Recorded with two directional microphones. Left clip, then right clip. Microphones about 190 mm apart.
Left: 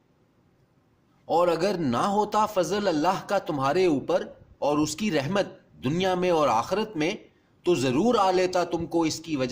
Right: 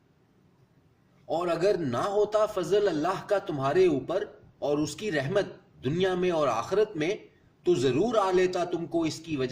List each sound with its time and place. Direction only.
1.3 s a man's voice: 50° left (ahead or behind)